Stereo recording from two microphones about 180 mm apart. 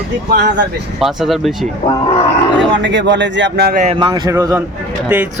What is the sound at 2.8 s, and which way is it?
Speech, 80° right.